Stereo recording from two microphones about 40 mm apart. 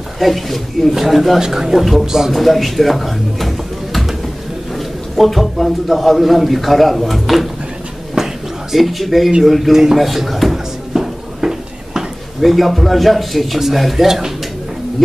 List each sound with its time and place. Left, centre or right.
0.2 s a man's voice: centre
1.4 s speech: centre
1.9 s a man's voice: centre
8.7 s a man's voice: centre
10.9 s a sound: centre
12.4 s a man's voice: centre